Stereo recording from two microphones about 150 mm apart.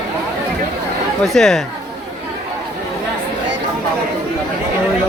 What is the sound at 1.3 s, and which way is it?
Speech, centre (ahead or behind).